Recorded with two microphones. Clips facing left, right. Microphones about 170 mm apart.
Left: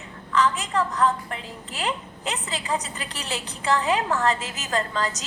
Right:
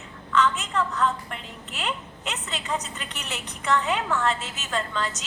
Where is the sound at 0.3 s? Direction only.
35° left (ahead or behind).